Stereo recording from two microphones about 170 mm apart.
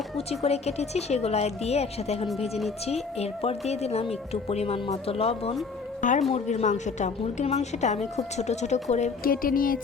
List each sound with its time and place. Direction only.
0.2 s a woman's voice: 35° left (ahead or behind)
6.0 s a woman's voice: 50° left (ahead or behind)